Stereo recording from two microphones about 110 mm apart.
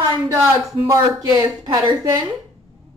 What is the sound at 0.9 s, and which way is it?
Speech, 35° right (ahead or behind).